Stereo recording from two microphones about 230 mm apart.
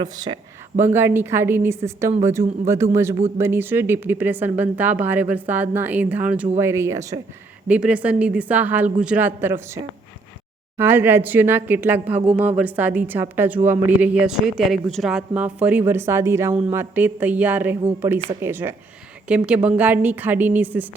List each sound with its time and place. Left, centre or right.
0.0 s a woman's voice: centre